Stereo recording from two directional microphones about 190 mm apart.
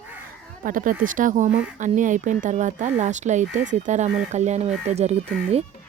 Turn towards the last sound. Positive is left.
turn(degrees=-35)  # may be behind; listen again after turning